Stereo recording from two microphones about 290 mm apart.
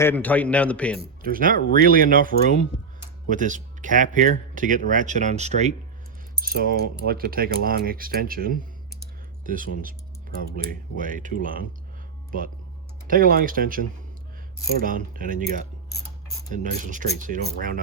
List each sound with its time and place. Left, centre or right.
0.0 s a man's voice: centre
1.2 s speech: right
6.3 s keys jangling: right
7.0 s speech: right
13.1 s speech: right
16.5 s speech: right